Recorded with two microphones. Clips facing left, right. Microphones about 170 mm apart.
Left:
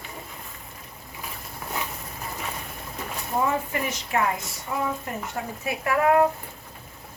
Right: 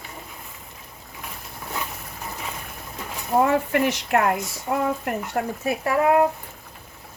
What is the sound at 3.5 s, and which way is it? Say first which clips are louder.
A woman's voice: right 6 dB; 70° right (ahead or behind).